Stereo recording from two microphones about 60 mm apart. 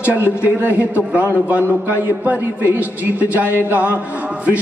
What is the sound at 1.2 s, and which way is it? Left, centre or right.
A man's voice, right.